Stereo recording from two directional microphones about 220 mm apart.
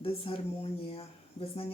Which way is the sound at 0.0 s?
25° left (ahead or behind).